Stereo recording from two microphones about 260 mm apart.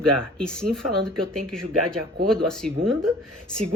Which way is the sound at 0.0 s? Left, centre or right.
Right.